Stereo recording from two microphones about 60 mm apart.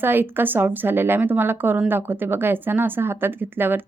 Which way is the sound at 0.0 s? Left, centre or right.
Right.